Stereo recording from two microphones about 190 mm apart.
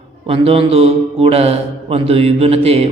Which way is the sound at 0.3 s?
30° right (ahead or behind).